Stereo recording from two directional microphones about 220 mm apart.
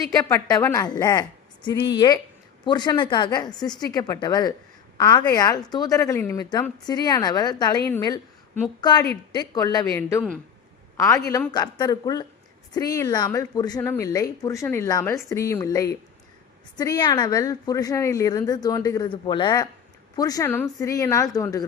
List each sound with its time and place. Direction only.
0.1 s a woman's voice: 15° left (ahead or behind)